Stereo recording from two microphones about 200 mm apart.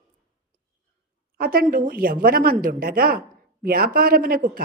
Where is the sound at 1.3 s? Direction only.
45° right (ahead or behind).